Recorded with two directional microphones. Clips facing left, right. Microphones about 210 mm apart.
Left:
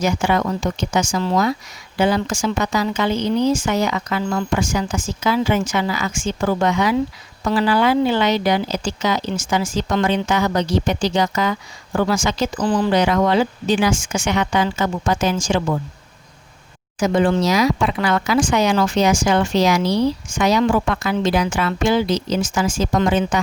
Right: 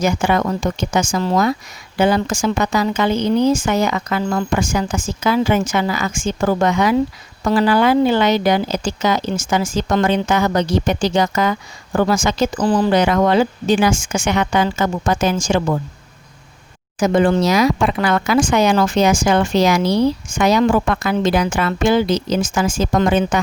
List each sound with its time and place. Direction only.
0.0 s speech: 50° right (ahead or behind)
17.0 s speech: 50° right (ahead or behind)